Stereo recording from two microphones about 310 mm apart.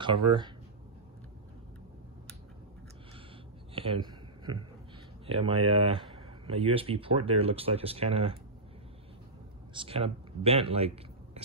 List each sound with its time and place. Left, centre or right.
0.0 s speech: centre
3.7 s a sound: centre
5.2 s speech: centre
9.8 s speech: centre